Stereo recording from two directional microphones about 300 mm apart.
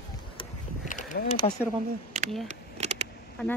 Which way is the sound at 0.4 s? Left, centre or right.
Left.